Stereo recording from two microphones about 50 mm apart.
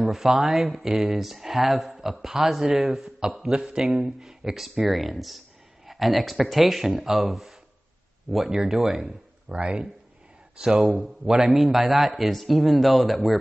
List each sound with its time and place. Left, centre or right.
0.1 s speech: centre
2.7 s speech: centre
3.0 s speech: centre
9.0 s speech: right; by 13.4 s centre